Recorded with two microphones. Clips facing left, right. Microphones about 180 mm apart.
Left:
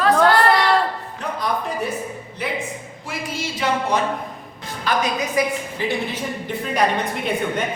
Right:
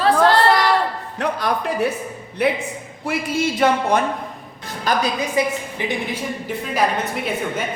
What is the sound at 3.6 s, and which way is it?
Speech, 55° right (ahead or behind).